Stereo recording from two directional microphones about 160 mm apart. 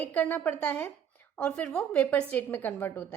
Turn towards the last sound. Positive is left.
turn(degrees=15)  # may be behind; listen again after turning